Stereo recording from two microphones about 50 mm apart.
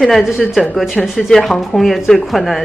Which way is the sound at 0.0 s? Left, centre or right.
Centre.